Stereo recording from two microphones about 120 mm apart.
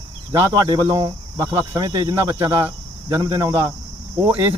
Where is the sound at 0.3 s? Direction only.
30° right (ahead or behind).